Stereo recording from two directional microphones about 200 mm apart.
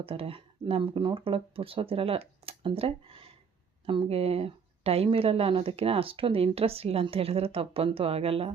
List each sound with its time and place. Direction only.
0.0 s a woman's voice: 30° right (ahead or behind)